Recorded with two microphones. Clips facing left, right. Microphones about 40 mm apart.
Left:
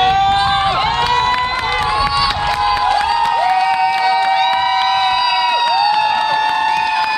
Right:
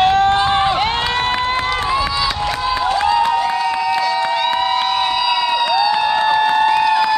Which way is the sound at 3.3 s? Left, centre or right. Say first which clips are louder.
Left 4 dB; centre.